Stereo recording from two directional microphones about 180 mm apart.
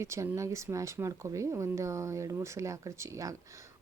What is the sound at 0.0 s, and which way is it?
Speech, 15° right (ahead or behind).